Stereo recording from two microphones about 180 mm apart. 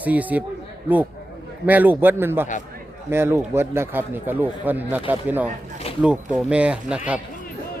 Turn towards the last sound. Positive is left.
turn(degrees=-5)  # may be behind; listen again after turning